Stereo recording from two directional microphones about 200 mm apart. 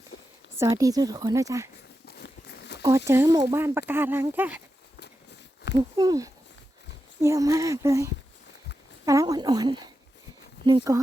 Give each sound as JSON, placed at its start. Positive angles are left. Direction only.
{"t": 0.1, "sound": "a sound", "side_deg": 55}
{"t": 0.5, "sound": "speech", "side_deg": -15}
{"t": 2.0, "sound": "walk", "side_deg": 55}
{"t": 3.1, "sound": "speech", "side_deg": -15}
{"t": 4.9, "sound": "a sound", "side_deg": 60}
{"t": 6.0, "sound": "speech", "side_deg": -20}